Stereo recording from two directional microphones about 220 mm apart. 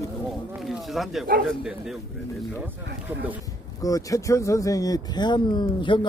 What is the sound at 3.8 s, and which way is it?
Speech, 15° left (ahead or behind).